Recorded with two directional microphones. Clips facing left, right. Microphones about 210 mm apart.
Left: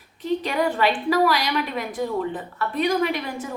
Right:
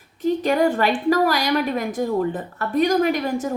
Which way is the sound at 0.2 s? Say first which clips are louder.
Right 5 dB; 45° right (ahead or behind).